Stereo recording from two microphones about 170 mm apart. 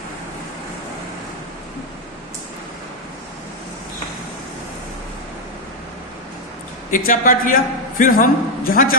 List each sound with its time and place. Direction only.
6.9 s a man's voice: 55° left (ahead or behind)